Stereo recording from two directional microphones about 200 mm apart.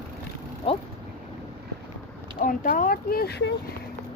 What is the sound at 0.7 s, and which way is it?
Speech, 30° left (ahead or behind).